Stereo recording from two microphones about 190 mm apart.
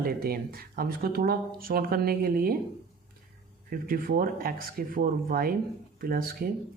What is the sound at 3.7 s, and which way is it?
Speech, 50° right (ahead or behind).